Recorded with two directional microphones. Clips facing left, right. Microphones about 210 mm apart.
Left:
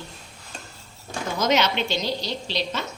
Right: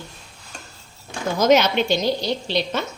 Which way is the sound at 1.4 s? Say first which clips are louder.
Right 6 dB; 50° right (ahead or behind).